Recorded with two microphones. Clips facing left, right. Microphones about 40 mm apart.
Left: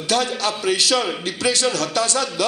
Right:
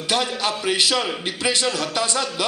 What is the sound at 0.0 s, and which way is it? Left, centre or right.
Speech, right.